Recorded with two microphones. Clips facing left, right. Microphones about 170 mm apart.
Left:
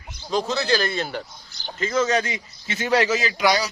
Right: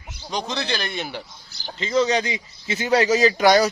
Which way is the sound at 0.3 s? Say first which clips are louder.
Left 5 dB; 5° left (ahead or behind).